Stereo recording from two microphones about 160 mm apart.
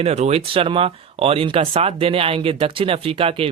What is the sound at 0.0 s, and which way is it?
Speech, 40° right (ahead or behind).